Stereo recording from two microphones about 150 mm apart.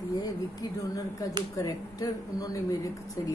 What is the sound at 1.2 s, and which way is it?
Speech, 20° left (ahead or behind).